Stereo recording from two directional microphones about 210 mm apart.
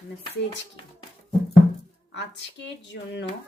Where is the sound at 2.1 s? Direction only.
55° left (ahead or behind).